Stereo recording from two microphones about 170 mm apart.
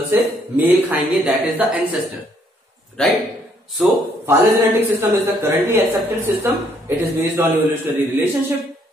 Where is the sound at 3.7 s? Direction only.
10° right (ahead or behind).